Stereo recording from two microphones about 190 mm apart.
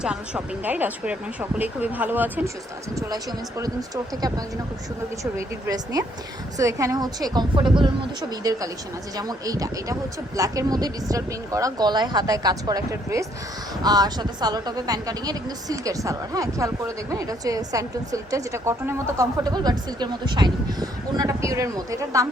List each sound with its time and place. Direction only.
0.0 s speech: 5° right (ahead or behind)
3.6 s speech: 20° right (ahead or behind)